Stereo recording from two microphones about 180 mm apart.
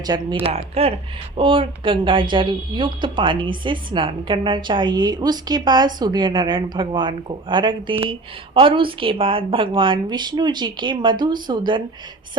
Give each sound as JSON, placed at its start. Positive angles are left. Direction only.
{"t": 0.0, "sound": "a woman's voice", "side_deg": -25}
{"t": 0.4, "sound": "a woman's voice", "side_deg": -35}